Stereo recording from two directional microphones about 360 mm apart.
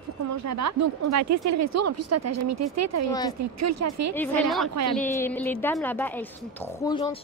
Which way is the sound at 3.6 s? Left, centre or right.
Right.